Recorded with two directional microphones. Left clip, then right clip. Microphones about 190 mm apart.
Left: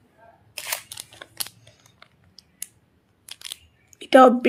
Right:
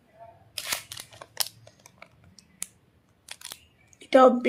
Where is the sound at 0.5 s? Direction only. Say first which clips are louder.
Left 1 dB; centre (ahead or behind).